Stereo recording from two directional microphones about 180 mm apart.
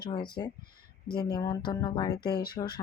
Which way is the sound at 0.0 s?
25° left (ahead or behind).